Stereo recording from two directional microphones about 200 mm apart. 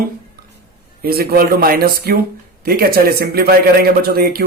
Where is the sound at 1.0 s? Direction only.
50° right (ahead or behind).